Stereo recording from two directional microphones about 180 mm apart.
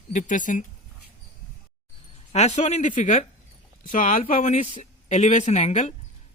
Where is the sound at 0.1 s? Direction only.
45° left (ahead or behind).